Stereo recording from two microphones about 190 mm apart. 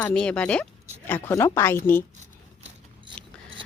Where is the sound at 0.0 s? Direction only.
5° left (ahead or behind).